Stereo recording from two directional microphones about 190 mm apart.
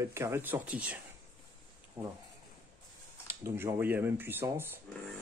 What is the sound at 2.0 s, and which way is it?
Speech, 20° right (ahead or behind).